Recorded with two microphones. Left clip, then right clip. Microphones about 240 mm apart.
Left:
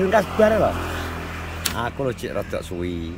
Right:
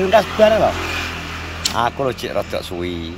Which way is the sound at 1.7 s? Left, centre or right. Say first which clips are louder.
Right 8 dB; centre.